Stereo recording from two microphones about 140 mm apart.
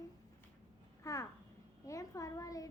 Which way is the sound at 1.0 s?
25° left (ahead or behind).